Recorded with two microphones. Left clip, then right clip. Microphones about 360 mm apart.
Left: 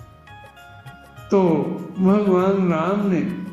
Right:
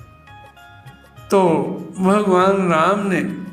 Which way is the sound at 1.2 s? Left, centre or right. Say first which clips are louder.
Right 3 dB; right.